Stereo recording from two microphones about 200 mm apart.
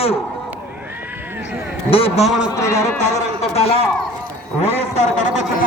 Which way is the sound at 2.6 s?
15° left (ahead or behind).